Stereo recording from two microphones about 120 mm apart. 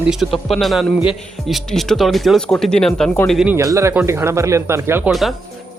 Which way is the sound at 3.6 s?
25° right (ahead or behind).